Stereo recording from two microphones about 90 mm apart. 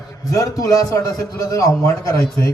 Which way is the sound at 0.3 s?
40° left (ahead or behind).